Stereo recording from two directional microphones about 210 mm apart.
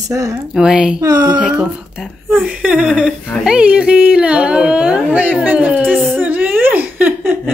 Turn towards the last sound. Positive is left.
turn(degrees=-10)  # may be behind; listen again after turning